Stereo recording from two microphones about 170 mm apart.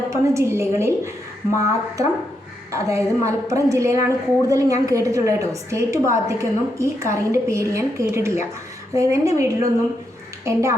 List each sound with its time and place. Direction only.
0.1 s a woman's voice: 15° right (ahead or behind)